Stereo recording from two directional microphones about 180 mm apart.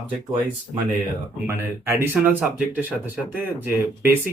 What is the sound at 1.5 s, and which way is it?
Speech, 15° right (ahead or behind).